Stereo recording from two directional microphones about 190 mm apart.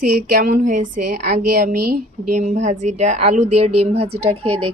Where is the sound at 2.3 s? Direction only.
35° right (ahead or behind).